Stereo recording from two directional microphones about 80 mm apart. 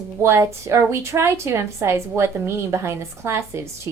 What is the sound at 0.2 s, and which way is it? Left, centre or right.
A woman's voice, right.